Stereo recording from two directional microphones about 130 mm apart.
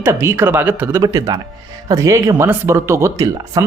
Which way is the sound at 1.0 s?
30° right (ahead or behind).